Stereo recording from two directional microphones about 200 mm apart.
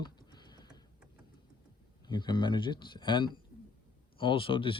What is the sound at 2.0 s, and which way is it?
Speech, 20° left (ahead or behind).